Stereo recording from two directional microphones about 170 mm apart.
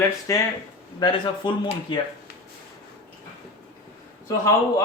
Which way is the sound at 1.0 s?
25° left (ahead or behind).